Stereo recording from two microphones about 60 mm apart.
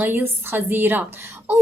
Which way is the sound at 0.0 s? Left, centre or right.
Right.